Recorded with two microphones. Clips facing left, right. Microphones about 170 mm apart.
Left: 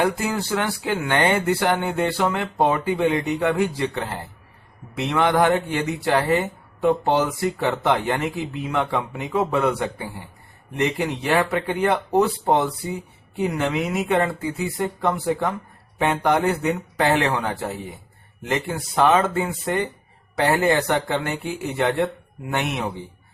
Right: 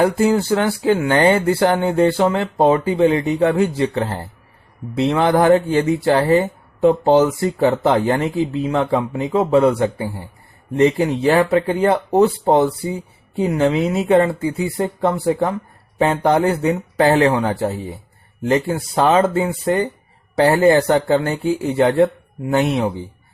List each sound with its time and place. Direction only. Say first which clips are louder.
0.0 s speech: right 7 dB; 30° right (ahead or behind)